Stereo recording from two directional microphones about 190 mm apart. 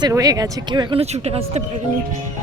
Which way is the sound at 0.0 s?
20° right (ahead or behind).